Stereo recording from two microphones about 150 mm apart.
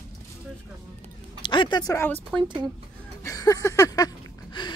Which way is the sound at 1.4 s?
30° left (ahead or behind).